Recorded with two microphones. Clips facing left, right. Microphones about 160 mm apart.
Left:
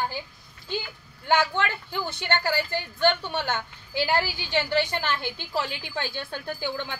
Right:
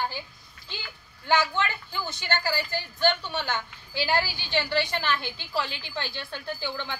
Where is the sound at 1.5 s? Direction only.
60° left (ahead or behind).